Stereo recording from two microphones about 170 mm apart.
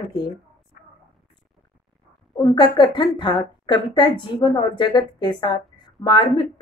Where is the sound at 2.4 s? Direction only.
30° left (ahead or behind).